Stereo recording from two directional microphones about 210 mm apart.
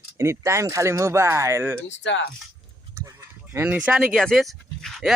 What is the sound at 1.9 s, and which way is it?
Speech, 60° left (ahead or behind).